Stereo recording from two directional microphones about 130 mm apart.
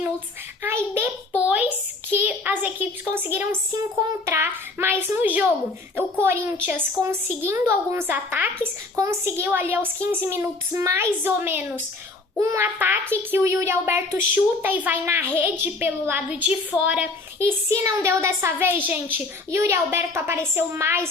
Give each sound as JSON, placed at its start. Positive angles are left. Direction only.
{"t": 0.6, "sound": "a child's voice", "side_deg": -15}
{"t": 17.7, "sound": "a woman's voice", "side_deg": -25}